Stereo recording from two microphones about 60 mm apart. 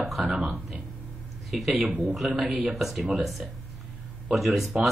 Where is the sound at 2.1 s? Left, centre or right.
Centre.